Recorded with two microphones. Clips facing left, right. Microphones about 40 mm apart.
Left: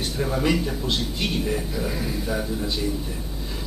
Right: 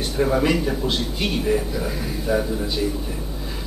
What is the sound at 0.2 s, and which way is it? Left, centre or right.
A man's voice, centre.